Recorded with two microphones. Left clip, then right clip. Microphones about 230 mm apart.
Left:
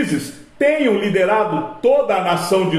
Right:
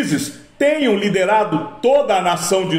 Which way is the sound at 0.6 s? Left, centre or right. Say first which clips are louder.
Even; right.